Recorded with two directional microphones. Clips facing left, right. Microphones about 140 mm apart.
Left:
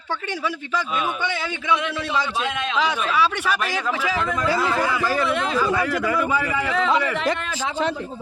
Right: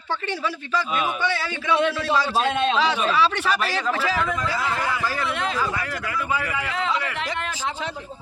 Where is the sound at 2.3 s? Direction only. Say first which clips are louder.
Right 4 dB; 35° right (ahead or behind).